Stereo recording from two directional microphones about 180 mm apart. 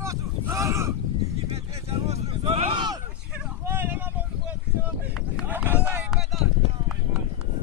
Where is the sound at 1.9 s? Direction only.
35° right (ahead or behind).